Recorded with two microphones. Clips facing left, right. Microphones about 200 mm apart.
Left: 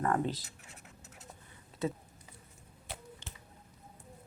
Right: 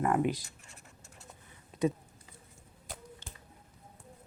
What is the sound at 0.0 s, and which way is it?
Speech, 15° right (ahead or behind).